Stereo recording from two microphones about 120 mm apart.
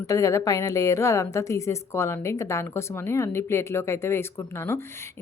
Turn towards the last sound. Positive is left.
turn(degrees=20)  # may be behind; listen again after turning